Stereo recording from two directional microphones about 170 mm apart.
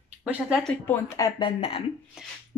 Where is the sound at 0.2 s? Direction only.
5° right (ahead or behind).